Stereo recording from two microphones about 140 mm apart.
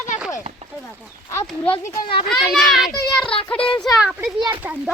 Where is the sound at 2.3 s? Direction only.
Centre (ahead or behind).